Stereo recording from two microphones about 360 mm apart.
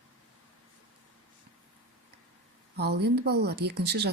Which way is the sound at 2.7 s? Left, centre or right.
Right.